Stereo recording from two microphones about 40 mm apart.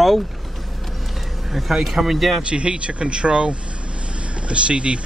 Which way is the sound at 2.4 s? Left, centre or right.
Right.